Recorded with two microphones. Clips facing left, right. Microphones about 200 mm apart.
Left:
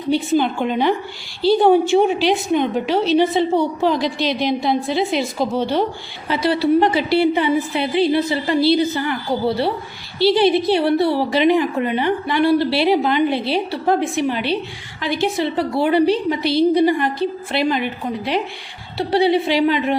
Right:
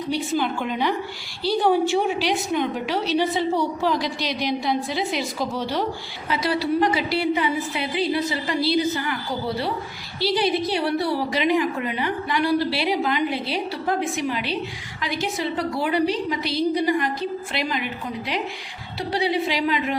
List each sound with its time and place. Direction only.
0.1 s a woman's voice: 25° left (ahead or behind)
10.2 s a woman's voice: 25° left (ahead or behind)
16.4 s a woman's voice: 65° left (ahead or behind)
16.7 s a woman's voice: 30° left (ahead or behind)
18.9 s a woman's voice: 30° left (ahead or behind)